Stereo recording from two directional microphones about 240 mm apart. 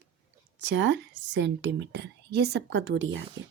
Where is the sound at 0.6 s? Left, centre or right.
Right.